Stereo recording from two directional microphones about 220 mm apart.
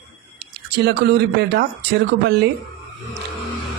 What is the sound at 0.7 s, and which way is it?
Speech, 50° right (ahead or behind).